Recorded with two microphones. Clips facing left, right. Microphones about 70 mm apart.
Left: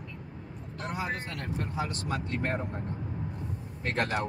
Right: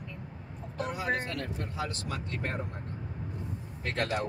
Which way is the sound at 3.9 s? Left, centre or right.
Left.